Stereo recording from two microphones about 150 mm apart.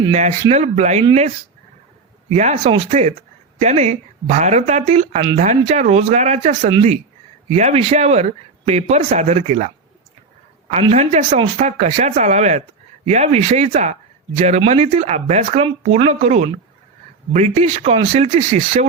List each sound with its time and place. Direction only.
0.1 s speech: 50° right (ahead or behind)
2.3 s speech: 50° right (ahead or behind)
10.9 s speech: 50° right (ahead or behind)